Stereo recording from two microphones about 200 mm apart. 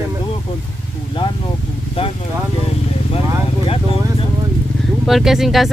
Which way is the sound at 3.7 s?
25° left (ahead or behind).